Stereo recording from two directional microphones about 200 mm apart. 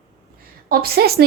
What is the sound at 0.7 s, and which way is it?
Speech, 50° right (ahead or behind).